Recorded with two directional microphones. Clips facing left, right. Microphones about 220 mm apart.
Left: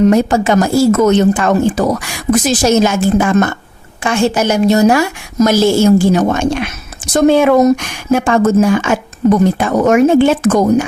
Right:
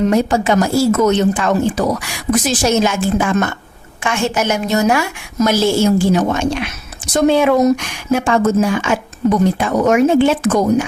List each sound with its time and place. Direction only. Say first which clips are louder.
0.1 s a woman's voice: left 3 dB; 45° left (ahead or behind)